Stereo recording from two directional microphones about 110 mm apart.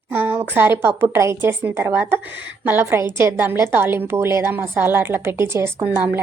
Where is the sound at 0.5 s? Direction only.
20° right (ahead or behind).